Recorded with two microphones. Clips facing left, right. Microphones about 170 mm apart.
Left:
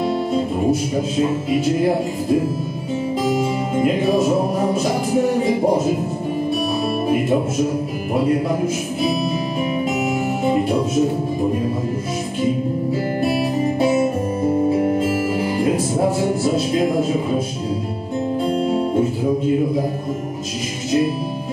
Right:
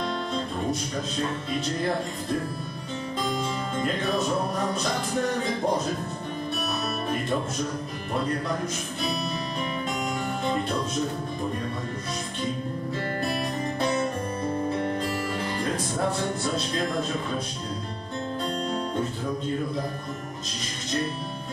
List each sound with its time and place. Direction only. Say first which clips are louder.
0.0 s speech: left 10 dB; 5° left (ahead or behind)
3.3 s music: left 9 dB; 10° left (ahead or behind)
4.6 s speech: left 8 dB; 10° left (ahead or behind)
7.1 s speech: left 10 dB; 10° left (ahead or behind)
9.8 s music: left 9 dB; 10° left (ahead or behind)
13.2 s music: left 11 dB; 5° left (ahead or behind)
14.4 s music: left 11 dB; 20° left (ahead or behind)
14.7 s music: left 10 dB; 10° left (ahead or behind)
16.0 s speech: left 9 dB; 5° left (ahead or behind)
18.4 s guitar: left 10 dB; 10° left (ahead or behind)
19.4 s speech: left 10 dB; 10° left (ahead or behind)